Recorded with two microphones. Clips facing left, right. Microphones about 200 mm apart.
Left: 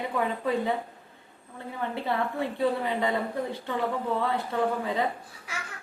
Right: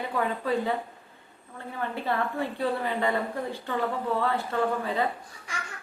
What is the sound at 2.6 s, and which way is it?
A woman's voice, 20° left (ahead or behind).